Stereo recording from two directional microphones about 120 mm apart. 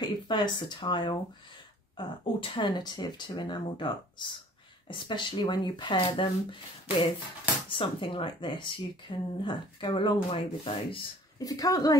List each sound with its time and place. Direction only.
0.0 s speech: 40° left (ahead or behind)
11.3 s speech: 30° left (ahead or behind)